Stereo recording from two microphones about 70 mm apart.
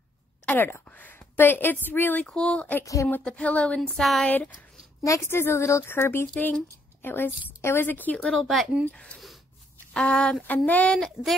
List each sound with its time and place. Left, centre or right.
0.5 s a woman's voice: left
2.2 s speech: centre
2.8 s a sound: left
3.3 s speech: centre
3.9 s speech: centre
5.0 s a sound: left
5.9 s a woman's voice: left
8.2 s speech: centre
8.9 s speech: centre
10.4 s a woman's voice: left
11.0 s speech: centre